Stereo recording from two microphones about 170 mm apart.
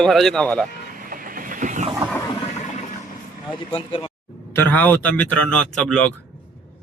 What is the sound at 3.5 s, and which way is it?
Speech, 35° left (ahead or behind).